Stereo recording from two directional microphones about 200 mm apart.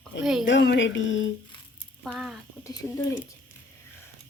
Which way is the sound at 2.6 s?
20° left (ahead or behind).